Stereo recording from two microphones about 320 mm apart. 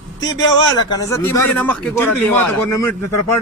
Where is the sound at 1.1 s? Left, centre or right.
Centre.